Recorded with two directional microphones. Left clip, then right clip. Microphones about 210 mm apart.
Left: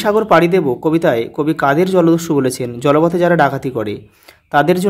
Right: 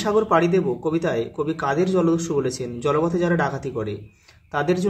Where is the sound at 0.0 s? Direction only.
50° left (ahead or behind).